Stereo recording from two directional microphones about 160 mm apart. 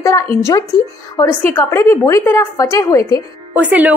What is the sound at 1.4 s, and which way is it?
A woman's voice, 15° left (ahead or behind).